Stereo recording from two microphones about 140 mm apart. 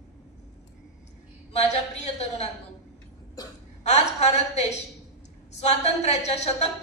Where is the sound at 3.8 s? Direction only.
55° left (ahead or behind).